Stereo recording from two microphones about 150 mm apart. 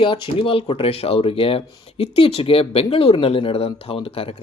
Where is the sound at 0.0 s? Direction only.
35° left (ahead or behind).